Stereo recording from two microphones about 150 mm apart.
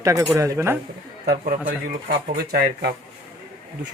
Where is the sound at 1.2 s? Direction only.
60° right (ahead or behind).